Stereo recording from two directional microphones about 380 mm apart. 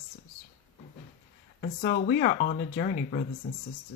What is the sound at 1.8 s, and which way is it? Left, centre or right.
Speech, left.